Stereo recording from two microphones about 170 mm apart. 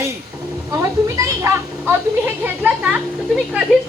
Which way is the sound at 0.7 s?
20° right (ahead or behind).